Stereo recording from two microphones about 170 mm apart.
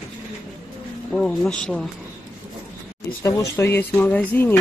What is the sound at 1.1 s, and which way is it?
Speech, 5° left (ahead or behind).